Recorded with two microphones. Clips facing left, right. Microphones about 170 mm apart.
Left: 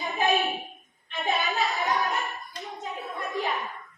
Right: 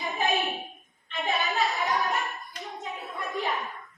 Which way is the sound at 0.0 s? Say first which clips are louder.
Left 2 dB; centre (ahead or behind).